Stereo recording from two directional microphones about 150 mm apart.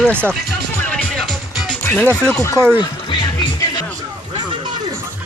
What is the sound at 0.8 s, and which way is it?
Music, 10° left (ahead or behind).